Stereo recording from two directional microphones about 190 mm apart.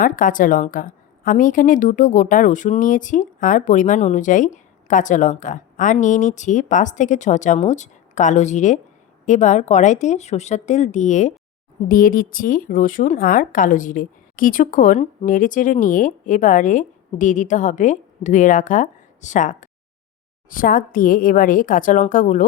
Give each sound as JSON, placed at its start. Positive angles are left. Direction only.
{"t": 0.0, "sound": "a woman's voice", "side_deg": 45}